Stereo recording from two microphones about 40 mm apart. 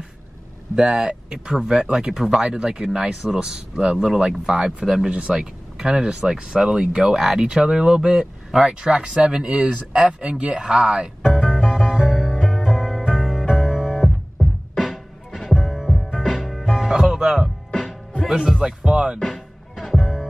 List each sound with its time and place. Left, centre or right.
0.7 s speech: centre
11.3 s music: centre
14.0 s music: centre
15.6 s music: centre
17.6 s music: centre
18.5 s music: centre
20.0 s music: centre